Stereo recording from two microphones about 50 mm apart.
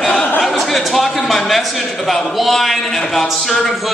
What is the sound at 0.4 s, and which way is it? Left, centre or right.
A man's voice, centre.